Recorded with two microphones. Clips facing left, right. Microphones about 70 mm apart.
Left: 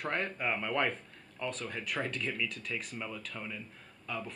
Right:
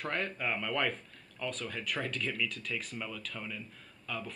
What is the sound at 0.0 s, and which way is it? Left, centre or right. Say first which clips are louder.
Speech: left 1 dB; centre.